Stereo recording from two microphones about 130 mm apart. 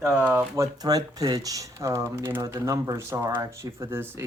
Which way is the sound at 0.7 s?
30° right (ahead or behind).